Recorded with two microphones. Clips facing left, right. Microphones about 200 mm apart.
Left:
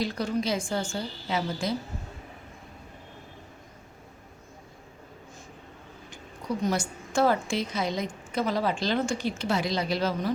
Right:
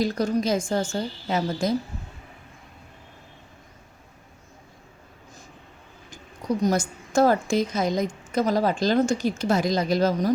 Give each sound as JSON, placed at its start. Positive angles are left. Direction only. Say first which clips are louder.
{"t": 0.0, "sound": "a woman's voice", "louder": "right 5 dB", "side_deg": -45}
{"t": 6.6, "sound": "a woman's voice", "louder": "right 4 dB", "side_deg": -40}